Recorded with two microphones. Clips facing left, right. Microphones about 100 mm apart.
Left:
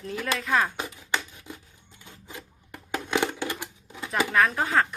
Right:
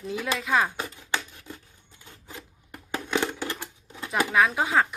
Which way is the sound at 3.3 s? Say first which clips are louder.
Left 1 dB; 15° left (ahead or behind).